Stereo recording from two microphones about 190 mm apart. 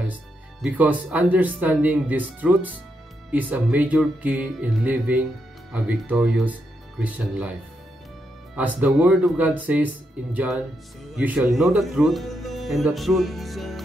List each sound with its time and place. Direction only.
0.6 s speech: 5° right (ahead or behind)
8.5 s speech: 5° right (ahead or behind)